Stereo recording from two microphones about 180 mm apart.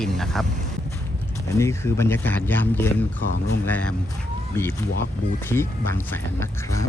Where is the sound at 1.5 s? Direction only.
15° left (ahead or behind).